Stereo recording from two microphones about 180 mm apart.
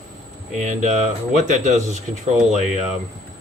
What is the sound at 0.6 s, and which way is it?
Speech, 40° right (ahead or behind).